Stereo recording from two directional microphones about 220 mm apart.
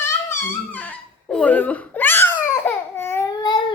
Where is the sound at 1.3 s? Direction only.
5° left (ahead or behind).